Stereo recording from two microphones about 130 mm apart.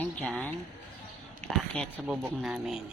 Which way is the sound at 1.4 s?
70° right (ahead or behind).